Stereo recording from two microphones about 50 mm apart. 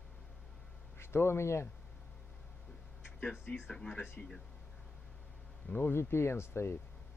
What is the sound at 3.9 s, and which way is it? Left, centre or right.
Speech, left.